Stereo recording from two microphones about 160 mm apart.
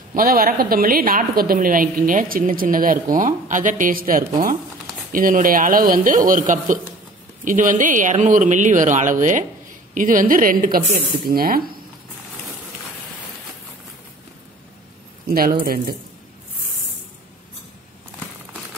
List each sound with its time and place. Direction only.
0.1 s a woman's voice: 65° right (ahead or behind)
15.2 s speech: 70° right (ahead or behind)